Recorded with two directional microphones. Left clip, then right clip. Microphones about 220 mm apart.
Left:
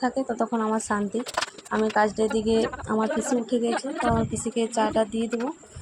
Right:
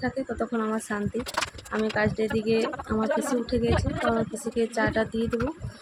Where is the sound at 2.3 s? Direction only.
30° right (ahead or behind).